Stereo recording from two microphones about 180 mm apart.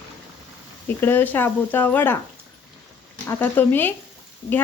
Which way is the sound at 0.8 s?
10° left (ahead or behind).